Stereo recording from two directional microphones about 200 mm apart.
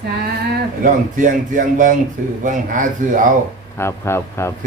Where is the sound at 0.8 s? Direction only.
40° right (ahead or behind).